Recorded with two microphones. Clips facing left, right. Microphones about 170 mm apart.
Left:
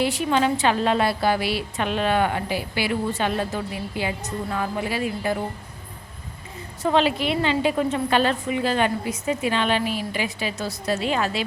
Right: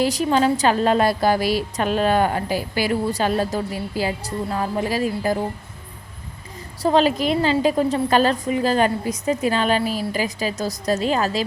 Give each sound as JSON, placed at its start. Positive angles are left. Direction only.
{"t": 0.0, "sound": "a woman's voice", "side_deg": -40}
{"t": 6.8, "sound": "a woman's voice", "side_deg": -40}